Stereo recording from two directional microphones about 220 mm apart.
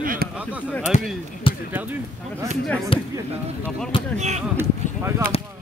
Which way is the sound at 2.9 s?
25° left (ahead or behind).